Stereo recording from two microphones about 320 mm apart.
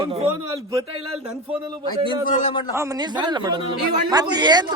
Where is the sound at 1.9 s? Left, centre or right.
Centre.